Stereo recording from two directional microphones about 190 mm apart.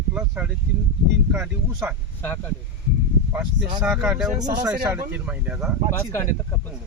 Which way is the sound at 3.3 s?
5° right (ahead or behind).